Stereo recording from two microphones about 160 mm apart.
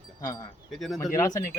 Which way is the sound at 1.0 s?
20° left (ahead or behind).